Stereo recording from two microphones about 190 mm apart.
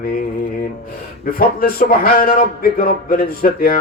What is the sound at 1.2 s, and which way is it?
Speech, 50° left (ahead or behind).